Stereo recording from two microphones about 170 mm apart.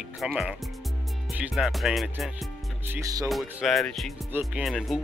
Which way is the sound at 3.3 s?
Centre (ahead or behind).